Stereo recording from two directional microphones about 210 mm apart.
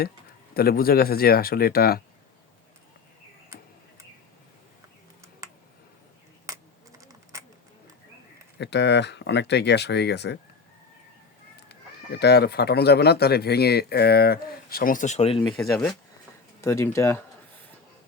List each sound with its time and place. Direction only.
0.5 s speech: 45° left (ahead or behind)
7.3 s a sound: 15° right (ahead or behind)
8.5 s speech: 55° left (ahead or behind)
11.5 s speech: 50° left (ahead or behind); by 15.5 s 25° left (ahead or behind)
15.5 s speech: centre (ahead or behind)
16.6 s speech: 10° left (ahead or behind)